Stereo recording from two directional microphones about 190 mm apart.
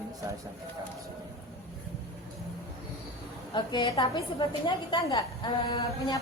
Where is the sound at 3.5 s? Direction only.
25° left (ahead or behind).